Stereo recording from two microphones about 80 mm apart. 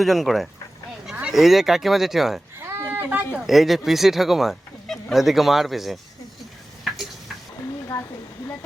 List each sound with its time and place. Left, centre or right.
0.0 s speech: centre
2.6 s a sound: right
3.4 s speech: centre
6.8 s tick-tock: centre